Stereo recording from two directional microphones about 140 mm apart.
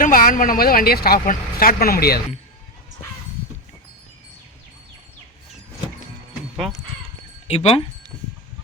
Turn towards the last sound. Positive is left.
turn(degrees=45)  # may be behind; listen again after turning